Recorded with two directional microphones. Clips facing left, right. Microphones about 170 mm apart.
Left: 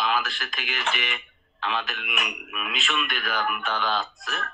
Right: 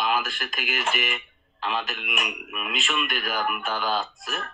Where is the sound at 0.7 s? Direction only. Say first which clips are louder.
Right 2 dB; 5° right (ahead or behind).